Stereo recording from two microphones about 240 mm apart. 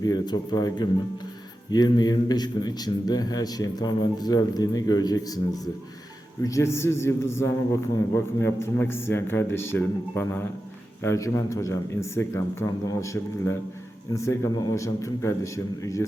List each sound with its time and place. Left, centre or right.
0.0 s a man's voice: centre
6.4 s a man's voice: centre